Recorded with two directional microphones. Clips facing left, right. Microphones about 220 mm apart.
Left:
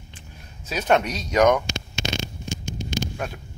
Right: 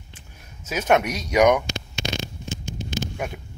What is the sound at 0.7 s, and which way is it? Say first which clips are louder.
Speech: right 1 dB; 10° right (ahead or behind).